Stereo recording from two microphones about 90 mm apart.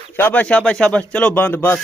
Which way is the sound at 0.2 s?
20° left (ahead or behind).